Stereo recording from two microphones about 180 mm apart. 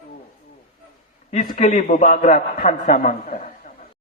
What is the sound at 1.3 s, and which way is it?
A man's voice, 40° left (ahead or behind).